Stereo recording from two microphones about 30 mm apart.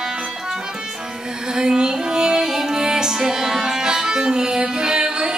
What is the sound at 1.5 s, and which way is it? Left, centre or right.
Music, right.